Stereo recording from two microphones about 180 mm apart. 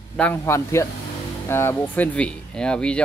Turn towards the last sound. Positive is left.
turn(degrees=5)  # may be behind; listen again after turning